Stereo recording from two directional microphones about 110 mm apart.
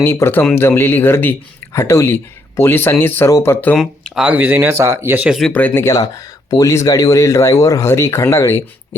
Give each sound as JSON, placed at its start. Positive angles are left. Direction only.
{"t": 0.0, "sound": "speech", "side_deg": 20}
{"t": 3.8, "sound": "speech", "side_deg": -5}
{"t": 4.3, "sound": "speech", "side_deg": -15}
{"t": 5.4, "sound": "speech", "side_deg": 10}
{"t": 5.9, "sound": "speech", "side_deg": 35}